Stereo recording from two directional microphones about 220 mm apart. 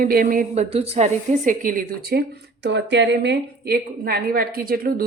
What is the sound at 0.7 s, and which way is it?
A woman's voice, 30° right (ahead or behind).